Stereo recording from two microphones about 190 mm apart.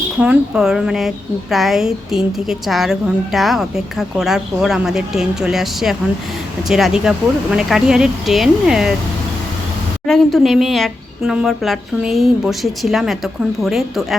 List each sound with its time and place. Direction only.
0.2 s a woman's voice: 5° right (ahead or behind)
10.1 s a woman's voice: centre (ahead or behind)